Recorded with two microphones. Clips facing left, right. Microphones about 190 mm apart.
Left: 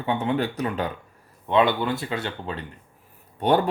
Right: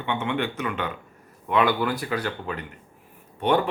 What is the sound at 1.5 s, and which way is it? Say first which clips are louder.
Speech: left 1 dB; 25° left (ahead or behind).